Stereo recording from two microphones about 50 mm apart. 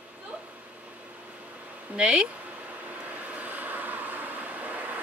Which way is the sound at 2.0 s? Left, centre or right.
Right.